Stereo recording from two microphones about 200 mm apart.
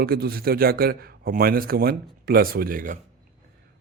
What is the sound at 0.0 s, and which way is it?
Speech, 50° right (ahead or behind).